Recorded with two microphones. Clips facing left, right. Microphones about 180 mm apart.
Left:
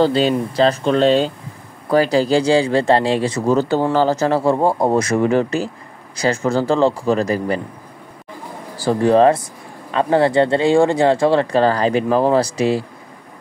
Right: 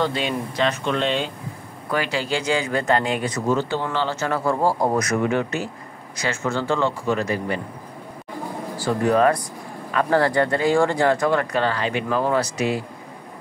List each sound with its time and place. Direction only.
0.0 s speech: 35° left (ahead or behind)
3.5 s speech: 40° left (ahead or behind)
8.7 s speech: 35° left (ahead or behind)